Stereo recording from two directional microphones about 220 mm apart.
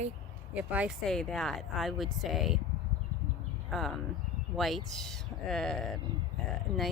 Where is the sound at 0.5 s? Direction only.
5° right (ahead or behind).